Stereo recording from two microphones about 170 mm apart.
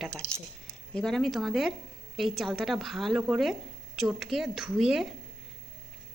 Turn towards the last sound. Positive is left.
turn(degrees=0)  # may be behind; listen again after turning